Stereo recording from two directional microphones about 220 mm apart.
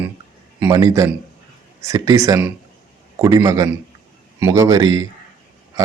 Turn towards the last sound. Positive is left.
turn(degrees=-15)  # may be behind; listen again after turning